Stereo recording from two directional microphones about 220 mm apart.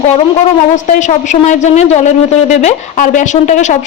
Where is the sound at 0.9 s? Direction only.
35° left (ahead or behind).